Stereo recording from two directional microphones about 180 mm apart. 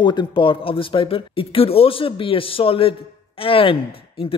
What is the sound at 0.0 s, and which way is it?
A man's voice, 25° left (ahead or behind).